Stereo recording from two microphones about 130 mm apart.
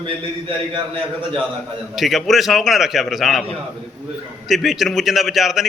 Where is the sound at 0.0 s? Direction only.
40° right (ahead or behind).